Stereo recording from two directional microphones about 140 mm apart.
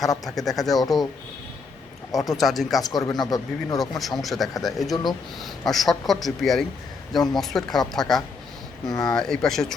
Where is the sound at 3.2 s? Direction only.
25° left (ahead or behind).